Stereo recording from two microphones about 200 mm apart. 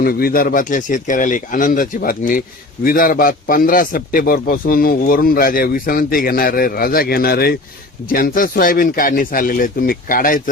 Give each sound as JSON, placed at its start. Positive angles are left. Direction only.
{"t": 0.0, "sound": "a man's voice", "side_deg": 50}